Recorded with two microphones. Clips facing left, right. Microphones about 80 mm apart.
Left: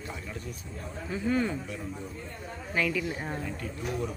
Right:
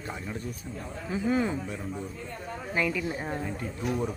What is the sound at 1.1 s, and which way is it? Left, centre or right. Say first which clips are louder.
Speech: right 1 dB; centre.